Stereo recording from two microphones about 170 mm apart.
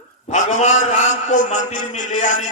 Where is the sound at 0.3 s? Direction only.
45° left (ahead or behind).